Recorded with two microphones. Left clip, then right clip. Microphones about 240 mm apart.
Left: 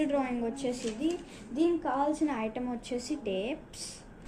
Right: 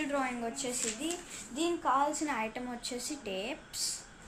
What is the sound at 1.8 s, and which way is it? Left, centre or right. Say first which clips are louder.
A woman's voice: even; right.